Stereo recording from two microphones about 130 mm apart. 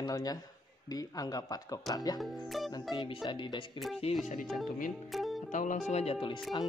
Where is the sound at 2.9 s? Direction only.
40° left (ahead or behind).